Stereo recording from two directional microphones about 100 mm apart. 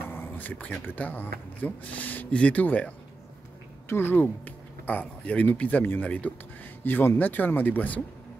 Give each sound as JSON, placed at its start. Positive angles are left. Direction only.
{"t": 0.1, "sound": "a sound", "side_deg": 20}
{"t": 0.8, "sound": "speech", "side_deg": 15}
{"t": 3.9, "sound": "speech", "side_deg": 20}